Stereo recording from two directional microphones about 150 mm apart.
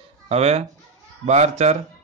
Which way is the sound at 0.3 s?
45° right (ahead or behind).